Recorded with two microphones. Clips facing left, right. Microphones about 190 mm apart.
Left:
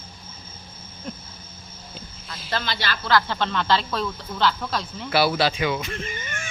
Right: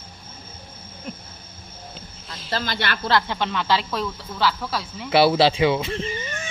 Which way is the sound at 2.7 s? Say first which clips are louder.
Right 2 dB; 60° right (ahead or behind).